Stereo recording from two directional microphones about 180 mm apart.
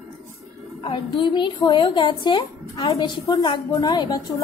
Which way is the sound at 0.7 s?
30° left (ahead or behind).